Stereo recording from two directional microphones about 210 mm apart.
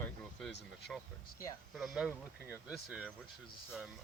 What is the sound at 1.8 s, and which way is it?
Speech, centre (ahead or behind).